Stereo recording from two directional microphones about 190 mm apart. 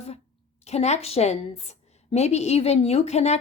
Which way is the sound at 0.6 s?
35° left (ahead or behind).